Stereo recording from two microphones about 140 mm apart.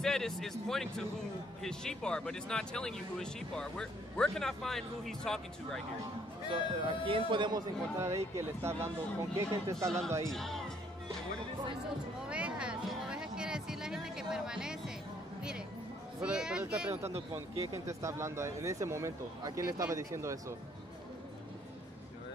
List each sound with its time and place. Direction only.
0.0 s speech: 5° left (ahead or behind)
6.5 s a man's voice: 40° right (ahead or behind)
8.4 s speech: 20° right (ahead or behind)
9.8 s speech: 5° left (ahead or behind)
12.2 s music: 5° right (ahead or behind)
16.2 s speech: 5° right (ahead or behind)
17.0 s speech: 45° right (ahead or behind)
17.8 s speech: 20° right (ahead or behind)